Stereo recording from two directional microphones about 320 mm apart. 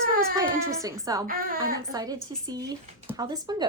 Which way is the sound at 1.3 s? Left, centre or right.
Right.